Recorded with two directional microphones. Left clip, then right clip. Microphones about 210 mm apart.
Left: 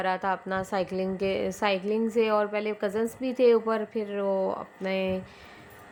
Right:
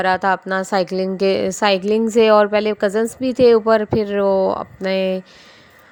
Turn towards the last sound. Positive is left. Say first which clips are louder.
# right 10 dB
turn(degrees=-40)  # may be behind; listen again after turning